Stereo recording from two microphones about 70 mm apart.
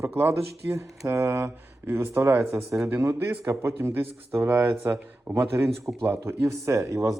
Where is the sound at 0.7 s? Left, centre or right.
Right.